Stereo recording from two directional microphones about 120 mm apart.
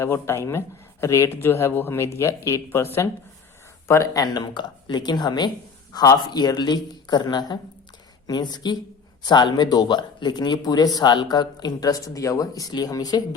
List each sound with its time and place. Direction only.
0.0 s speech: 20° left (ahead or behind)